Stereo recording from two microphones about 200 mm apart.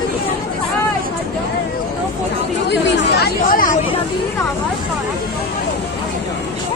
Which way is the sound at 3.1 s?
50° left (ahead or behind).